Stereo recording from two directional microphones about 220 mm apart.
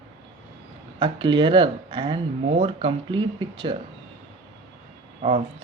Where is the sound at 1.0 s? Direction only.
20° right (ahead or behind).